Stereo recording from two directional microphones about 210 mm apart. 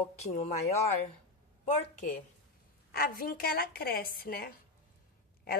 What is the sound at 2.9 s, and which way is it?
A woman's voice, 45° left (ahead or behind).